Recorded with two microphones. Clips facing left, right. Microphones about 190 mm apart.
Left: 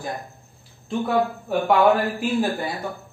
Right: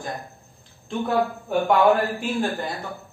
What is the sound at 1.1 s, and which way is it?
A man's voice, centre (ahead or behind).